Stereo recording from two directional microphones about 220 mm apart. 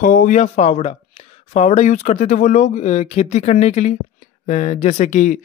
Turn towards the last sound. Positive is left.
turn(degrees=35)  # may be behind; listen again after turning